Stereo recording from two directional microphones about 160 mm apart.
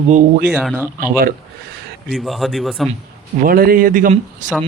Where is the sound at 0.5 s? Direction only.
10° right (ahead or behind).